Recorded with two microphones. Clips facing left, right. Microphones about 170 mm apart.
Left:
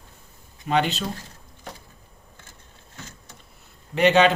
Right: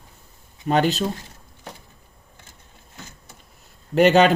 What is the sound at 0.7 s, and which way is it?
Speech, 40° right (ahead or behind).